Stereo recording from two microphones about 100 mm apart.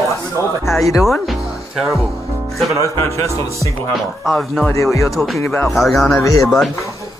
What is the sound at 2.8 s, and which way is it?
Speech, 30° left (ahead or behind).